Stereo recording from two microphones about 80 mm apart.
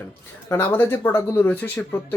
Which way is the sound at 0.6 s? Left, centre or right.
Left.